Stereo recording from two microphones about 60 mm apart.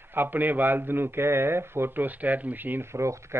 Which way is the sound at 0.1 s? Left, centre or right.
Right.